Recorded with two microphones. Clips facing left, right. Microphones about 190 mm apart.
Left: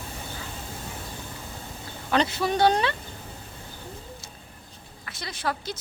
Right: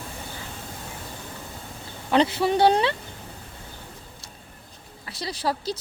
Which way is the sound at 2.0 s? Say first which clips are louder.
Right 4 dB; 25° right (ahead or behind).